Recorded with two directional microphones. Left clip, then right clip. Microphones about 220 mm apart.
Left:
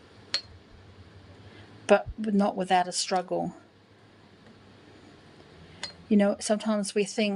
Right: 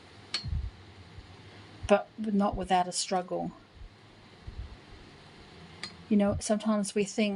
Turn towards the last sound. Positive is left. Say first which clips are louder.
# left 3 dB
turn(degrees=25)  # may be behind; listen again after turning